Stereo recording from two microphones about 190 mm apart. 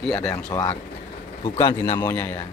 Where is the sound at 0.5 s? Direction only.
15° left (ahead or behind).